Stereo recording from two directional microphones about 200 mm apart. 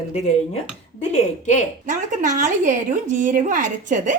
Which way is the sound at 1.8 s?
40° right (ahead or behind).